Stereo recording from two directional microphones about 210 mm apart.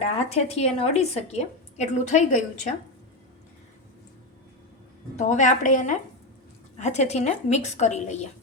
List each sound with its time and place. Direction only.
0.0 s a woman's voice: 30° left (ahead or behind)
5.1 s a woman's voice: 35° left (ahead or behind)